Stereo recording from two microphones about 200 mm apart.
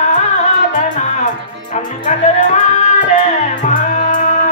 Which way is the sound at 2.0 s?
35° left (ahead or behind).